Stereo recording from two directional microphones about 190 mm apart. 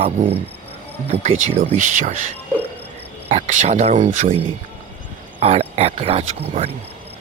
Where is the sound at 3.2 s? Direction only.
35° right (ahead or behind).